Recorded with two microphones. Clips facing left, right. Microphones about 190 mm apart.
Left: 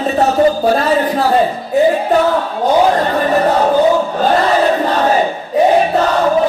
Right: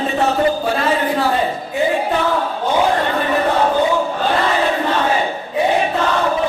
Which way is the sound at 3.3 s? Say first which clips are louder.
Left 5 dB; 40° left (ahead or behind).